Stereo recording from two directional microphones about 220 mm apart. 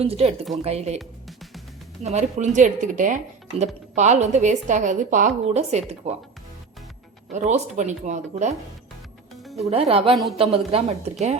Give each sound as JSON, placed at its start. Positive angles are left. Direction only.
{"t": 0.0, "sound": "a woman's voice", "side_deg": -25}
{"t": 0.9, "sound": "music", "side_deg": 0}
{"t": 2.0, "sound": "a woman's voice", "side_deg": -30}
{"t": 7.3, "sound": "speech", "side_deg": -30}
{"t": 9.4, "sound": "music", "side_deg": 0}
{"t": 9.6, "sound": "a woman's voice", "side_deg": -25}